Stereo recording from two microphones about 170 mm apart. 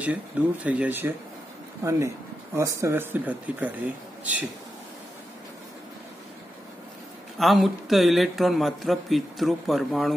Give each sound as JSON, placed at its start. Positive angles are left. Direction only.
{"t": 0.0, "sound": "speech", "side_deg": -10}
{"t": 7.3, "sound": "a man's voice", "side_deg": 0}